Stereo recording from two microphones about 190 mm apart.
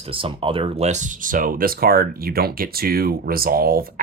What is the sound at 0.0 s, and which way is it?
Speech, 30° right (ahead or behind).